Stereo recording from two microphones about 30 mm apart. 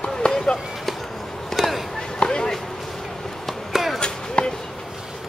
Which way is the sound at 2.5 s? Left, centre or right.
Centre.